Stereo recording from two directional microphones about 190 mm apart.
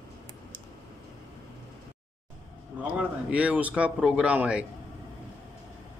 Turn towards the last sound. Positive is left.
turn(degrees=-5)  # may be behind; listen again after turning